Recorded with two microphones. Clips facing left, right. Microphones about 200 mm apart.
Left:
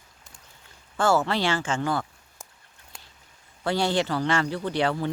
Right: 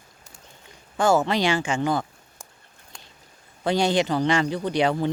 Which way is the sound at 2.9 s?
5° left (ahead or behind).